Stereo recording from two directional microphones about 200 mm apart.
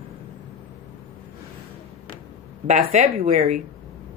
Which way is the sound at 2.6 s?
30° right (ahead or behind).